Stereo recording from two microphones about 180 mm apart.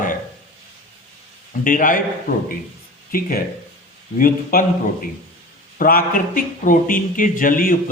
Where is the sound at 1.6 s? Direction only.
50° left (ahead or behind).